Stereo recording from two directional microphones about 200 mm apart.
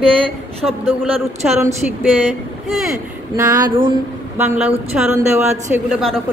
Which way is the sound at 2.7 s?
Centre (ahead or behind).